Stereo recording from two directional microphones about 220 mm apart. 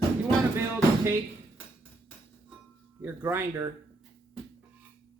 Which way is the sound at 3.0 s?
10° right (ahead or behind).